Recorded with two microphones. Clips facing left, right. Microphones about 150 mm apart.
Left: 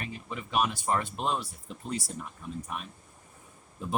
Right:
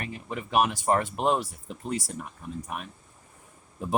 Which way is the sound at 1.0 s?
60° right (ahead or behind).